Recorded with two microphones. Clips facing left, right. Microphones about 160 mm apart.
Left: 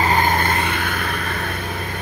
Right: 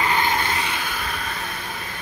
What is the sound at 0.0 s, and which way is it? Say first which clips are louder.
Vehicle: left 4 dB; 45° left (ahead or behind).